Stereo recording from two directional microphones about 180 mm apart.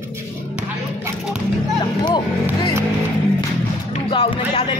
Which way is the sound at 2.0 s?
25° left (ahead or behind).